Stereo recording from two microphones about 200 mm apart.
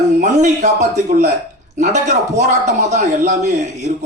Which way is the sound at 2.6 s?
35° right (ahead or behind).